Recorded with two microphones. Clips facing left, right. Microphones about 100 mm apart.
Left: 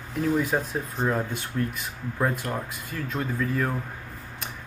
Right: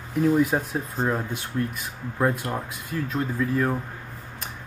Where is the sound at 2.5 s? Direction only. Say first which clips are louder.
Right 1 dB; 20° right (ahead or behind).